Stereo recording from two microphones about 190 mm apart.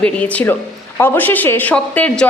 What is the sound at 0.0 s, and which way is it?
A woman's voice, 10° left (ahead or behind).